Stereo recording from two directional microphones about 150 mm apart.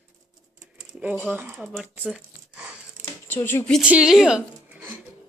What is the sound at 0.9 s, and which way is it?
Speech, 10° right (ahead or behind).